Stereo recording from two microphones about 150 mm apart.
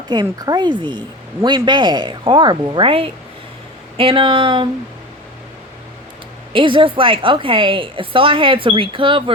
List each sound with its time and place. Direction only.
0.1 s speech: 25° right (ahead or behind)
6.5 s speech: 35° right (ahead or behind)